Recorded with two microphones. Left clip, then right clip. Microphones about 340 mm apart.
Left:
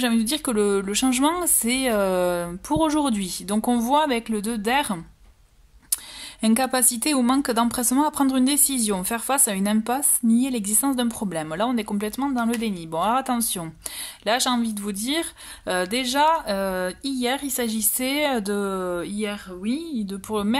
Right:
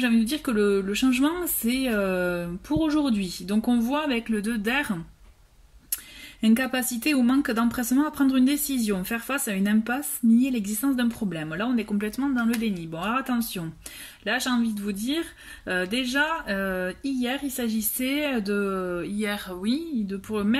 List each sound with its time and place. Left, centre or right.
0.0 s speech: centre
6.5 s speech: centre